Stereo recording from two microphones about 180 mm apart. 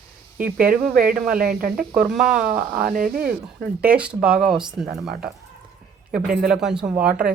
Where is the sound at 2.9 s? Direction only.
50° right (ahead or behind).